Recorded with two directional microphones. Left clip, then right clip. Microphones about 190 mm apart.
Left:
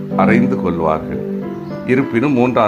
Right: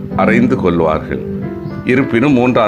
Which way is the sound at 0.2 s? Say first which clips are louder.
Right 2 dB; 15° right (ahead or behind).